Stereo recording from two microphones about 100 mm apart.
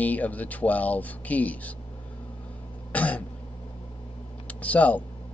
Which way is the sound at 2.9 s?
15° left (ahead or behind).